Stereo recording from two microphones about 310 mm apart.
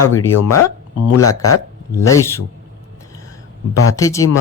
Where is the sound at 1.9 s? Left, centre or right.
Centre.